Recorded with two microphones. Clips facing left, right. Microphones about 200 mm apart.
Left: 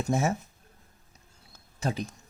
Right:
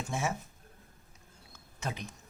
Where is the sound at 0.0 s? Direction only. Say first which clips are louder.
Left 7 dB; 40° left (ahead or behind).